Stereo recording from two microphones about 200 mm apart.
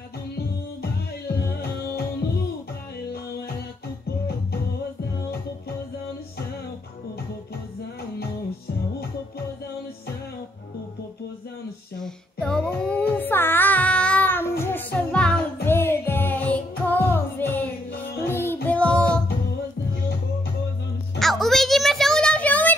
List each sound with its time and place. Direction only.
1.2 s music: 50° left (ahead or behind)
12.0 s music: 5° left (ahead or behind)
21.2 s a sound: centre (ahead or behind)